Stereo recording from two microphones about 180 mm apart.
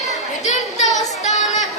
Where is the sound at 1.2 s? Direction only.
40° left (ahead or behind).